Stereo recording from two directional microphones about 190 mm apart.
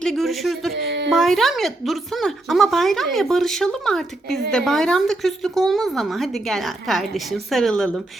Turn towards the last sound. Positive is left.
turn(degrees=5)  # may be behind; listen again after turning